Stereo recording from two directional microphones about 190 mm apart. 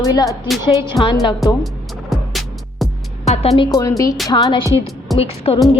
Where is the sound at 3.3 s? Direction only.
35° left (ahead or behind).